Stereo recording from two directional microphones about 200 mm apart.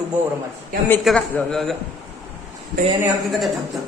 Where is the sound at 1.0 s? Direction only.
Centre (ahead or behind).